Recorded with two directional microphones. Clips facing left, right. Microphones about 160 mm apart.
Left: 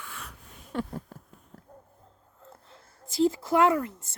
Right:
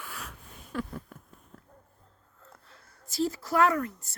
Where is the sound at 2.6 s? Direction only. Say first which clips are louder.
Left 4 dB; 25° left (ahead or behind).